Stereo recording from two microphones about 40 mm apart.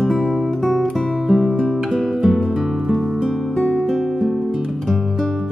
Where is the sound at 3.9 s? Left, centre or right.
Centre.